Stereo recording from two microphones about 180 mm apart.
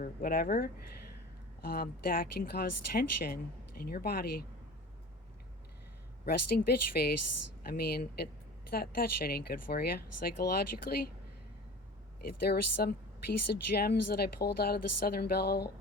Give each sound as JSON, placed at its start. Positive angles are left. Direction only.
{"t": 0.0, "sound": "speech", "side_deg": 55}
{"t": 6.2, "sound": "speech", "side_deg": 60}
{"t": 12.2, "sound": "speech", "side_deg": 60}